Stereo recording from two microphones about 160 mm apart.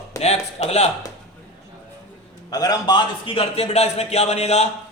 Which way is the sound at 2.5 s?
25° left (ahead or behind).